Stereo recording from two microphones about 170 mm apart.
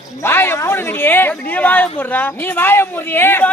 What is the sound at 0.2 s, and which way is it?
Speech, 15° left (ahead or behind).